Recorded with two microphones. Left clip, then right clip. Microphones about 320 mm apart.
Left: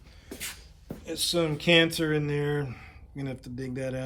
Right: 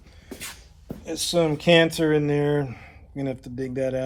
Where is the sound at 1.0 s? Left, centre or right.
Centre.